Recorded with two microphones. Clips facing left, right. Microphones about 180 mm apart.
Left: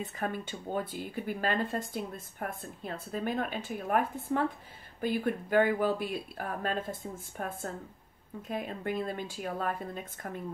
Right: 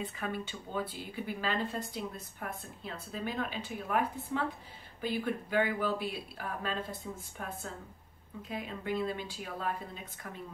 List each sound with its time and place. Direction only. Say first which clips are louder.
0.0 s speech: left 2 dB; 45° left (ahead or behind)